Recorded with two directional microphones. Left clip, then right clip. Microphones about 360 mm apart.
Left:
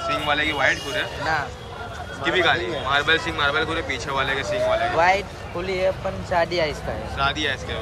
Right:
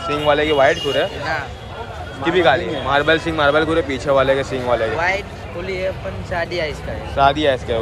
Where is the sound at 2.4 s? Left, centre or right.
Centre.